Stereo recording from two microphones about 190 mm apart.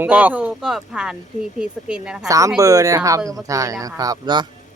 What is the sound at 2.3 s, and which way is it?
Speech, 15° right (ahead or behind).